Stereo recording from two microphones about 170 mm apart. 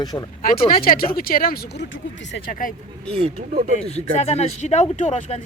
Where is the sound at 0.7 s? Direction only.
60° left (ahead or behind).